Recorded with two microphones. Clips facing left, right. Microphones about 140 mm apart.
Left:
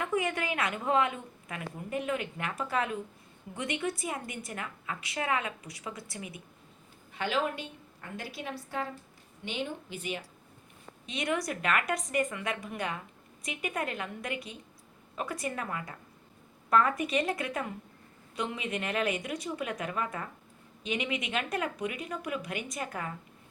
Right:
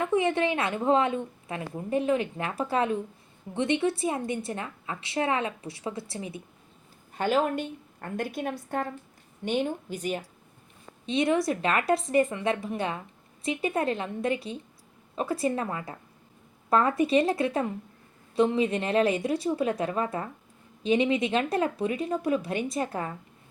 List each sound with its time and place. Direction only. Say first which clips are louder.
0.0 s a woman's voice: right 6 dB; 25° right (ahead or behind)
7.2 s a woman's voice: right 6 dB; 45° right (ahead or behind)
11.0 s a woman's voice: right 8 dB; 25° right (ahead or behind)